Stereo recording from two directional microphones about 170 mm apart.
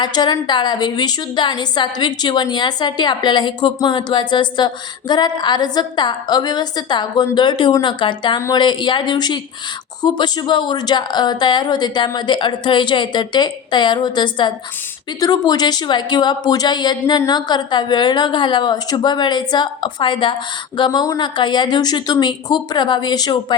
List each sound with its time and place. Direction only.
0.0 s a woman's voice: 25° left (ahead or behind)